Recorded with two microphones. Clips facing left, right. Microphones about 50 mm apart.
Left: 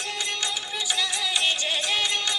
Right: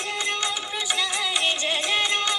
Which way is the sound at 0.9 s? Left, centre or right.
Right.